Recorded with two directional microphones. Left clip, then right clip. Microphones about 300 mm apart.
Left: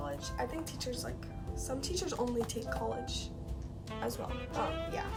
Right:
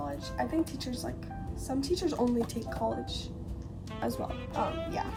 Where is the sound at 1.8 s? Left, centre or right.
Centre.